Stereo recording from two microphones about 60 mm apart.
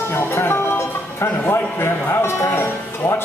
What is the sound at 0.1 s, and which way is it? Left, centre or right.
Music, left.